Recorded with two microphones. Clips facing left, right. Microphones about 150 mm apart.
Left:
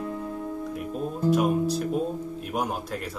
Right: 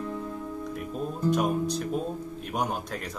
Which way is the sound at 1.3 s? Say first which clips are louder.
Left 5 dB; 5° left (ahead or behind).